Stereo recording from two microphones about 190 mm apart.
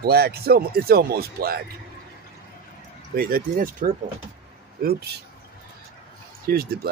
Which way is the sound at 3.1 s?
50° right (ahead or behind).